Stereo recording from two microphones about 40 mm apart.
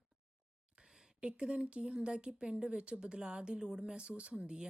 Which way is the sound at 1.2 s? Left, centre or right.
Right.